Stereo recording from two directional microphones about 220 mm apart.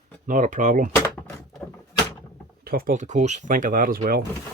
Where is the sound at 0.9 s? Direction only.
10° left (ahead or behind).